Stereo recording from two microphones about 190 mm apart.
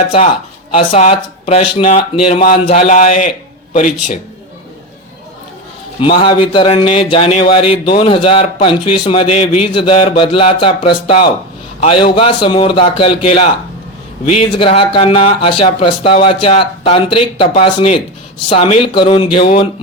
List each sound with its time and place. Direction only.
0.0 s speech: 35° left (ahead or behind)
6.0 s speech: 25° left (ahead or behind)
14.5 s speech: 25° left (ahead or behind)